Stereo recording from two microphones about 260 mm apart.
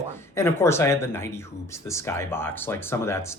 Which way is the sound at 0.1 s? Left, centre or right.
Centre.